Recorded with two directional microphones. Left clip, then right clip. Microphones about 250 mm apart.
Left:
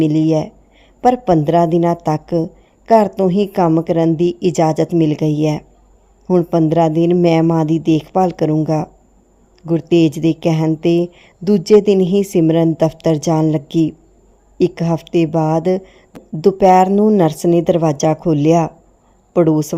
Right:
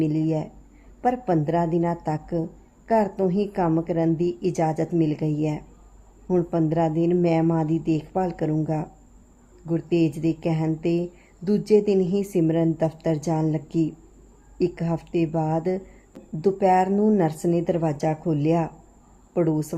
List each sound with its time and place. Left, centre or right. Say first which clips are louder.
0.0 s a woman's voice: left 10 dB; left